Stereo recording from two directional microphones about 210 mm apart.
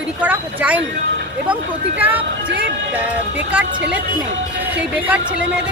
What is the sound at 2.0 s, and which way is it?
Speech, 10° right (ahead or behind).